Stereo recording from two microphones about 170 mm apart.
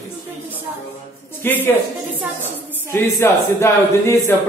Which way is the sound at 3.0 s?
15° left (ahead or behind).